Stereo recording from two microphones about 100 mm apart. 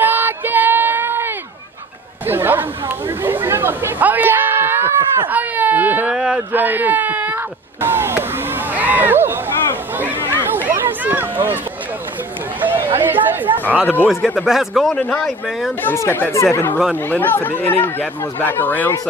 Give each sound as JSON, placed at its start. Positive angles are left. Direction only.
{"t": 0.0, "sound": "child singing", "side_deg": -20}
{"t": 2.2, "sound": "speech", "side_deg": -20}
{"t": 3.2, "sound": "chatter", "side_deg": -20}
{"t": 5.3, "sound": "speech", "side_deg": -15}
{"t": 9.9, "sound": "a sound", "side_deg": -20}
{"t": 12.5, "sound": "chatter", "side_deg": -20}
{"t": 14.0, "sound": "speech", "side_deg": -5}
{"t": 15.0, "sound": "speech", "side_deg": 10}
{"t": 15.8, "sound": "speech", "side_deg": 25}